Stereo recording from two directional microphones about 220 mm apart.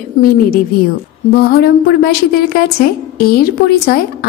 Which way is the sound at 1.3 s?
45° left (ahead or behind).